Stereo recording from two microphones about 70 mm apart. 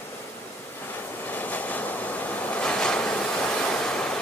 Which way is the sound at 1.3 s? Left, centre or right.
Left.